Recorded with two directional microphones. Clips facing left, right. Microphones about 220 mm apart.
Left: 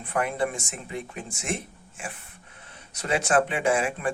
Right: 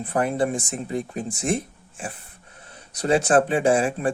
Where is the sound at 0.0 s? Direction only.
35° right (ahead or behind).